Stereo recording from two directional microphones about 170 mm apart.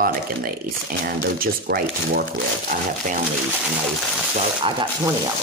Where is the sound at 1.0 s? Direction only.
60° right (ahead or behind).